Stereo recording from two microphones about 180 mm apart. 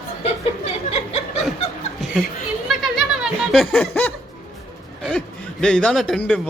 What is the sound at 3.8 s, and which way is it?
Snicker, 10° left (ahead or behind).